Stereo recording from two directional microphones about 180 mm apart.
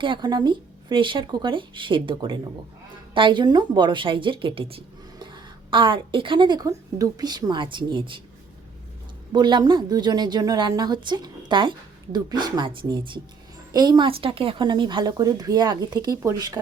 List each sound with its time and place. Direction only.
0.0 s a woman's voice: 25° right (ahead or behind)
9.3 s speech: 25° right (ahead or behind)